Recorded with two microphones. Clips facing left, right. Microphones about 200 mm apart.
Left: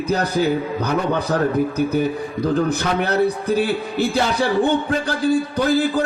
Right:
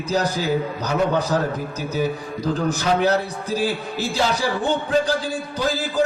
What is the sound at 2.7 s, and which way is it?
A man's voice, 60° left (ahead or behind).